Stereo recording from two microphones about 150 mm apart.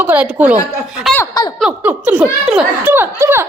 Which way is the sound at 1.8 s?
10° right (ahead or behind).